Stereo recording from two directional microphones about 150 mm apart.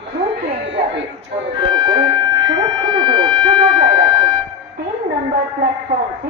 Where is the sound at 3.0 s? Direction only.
30° right (ahead or behind).